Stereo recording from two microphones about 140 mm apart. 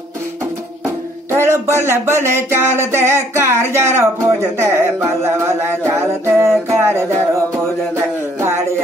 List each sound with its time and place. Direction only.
1.3 s speech: 20° right (ahead or behind)